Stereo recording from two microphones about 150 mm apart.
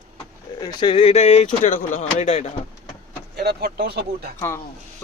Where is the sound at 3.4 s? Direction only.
90° right.